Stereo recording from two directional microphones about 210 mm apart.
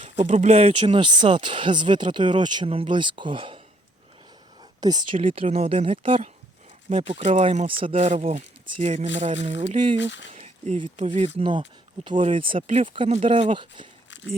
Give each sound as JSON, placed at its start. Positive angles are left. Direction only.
{"t": 0.0, "sound": "speech", "side_deg": -35}
{"t": 4.8, "sound": "speech", "side_deg": -20}
{"t": 10.0, "sound": "speech", "side_deg": 60}
{"t": 10.3, "sound": "speech", "side_deg": -30}
{"t": 12.1, "sound": "speech", "side_deg": -35}
{"t": 12.4, "sound": "speech", "side_deg": -25}